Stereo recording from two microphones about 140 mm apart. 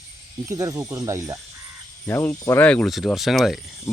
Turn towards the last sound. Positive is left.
turn(degrees=0)  # may be behind; listen again after turning